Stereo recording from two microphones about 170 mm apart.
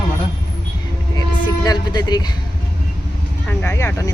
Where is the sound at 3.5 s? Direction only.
10° left (ahead or behind).